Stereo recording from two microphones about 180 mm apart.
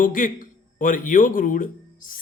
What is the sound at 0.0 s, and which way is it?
A man's voice, 50° left (ahead or behind).